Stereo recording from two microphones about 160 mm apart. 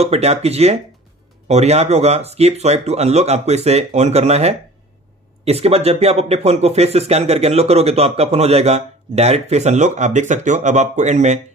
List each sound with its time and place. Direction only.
0.0 s speech: 40° right (ahead or behind)